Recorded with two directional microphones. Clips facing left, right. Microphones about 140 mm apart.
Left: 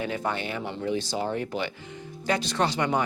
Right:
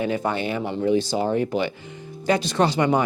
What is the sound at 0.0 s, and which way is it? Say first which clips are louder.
Speech: right 5 dB; 15° right (ahead or behind).